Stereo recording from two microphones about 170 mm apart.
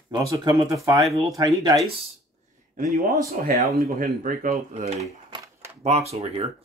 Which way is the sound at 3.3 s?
55° right (ahead or behind).